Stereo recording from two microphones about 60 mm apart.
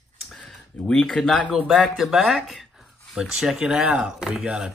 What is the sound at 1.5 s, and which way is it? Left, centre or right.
Speech, centre.